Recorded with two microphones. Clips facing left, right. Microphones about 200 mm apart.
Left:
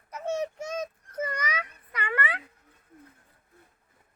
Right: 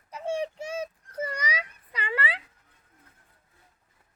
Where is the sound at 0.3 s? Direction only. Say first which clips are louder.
Even; 10° right (ahead or behind).